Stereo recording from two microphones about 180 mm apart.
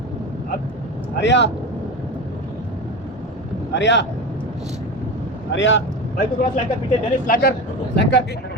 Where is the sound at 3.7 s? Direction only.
80° left.